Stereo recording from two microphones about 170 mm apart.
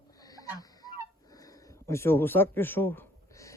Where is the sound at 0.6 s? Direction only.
20° left (ahead or behind).